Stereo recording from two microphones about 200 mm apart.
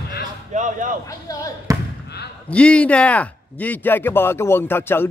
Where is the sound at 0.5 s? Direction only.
40° right (ahead or behind).